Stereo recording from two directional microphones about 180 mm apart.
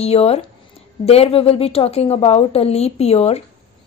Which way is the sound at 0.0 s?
35° left (ahead or behind).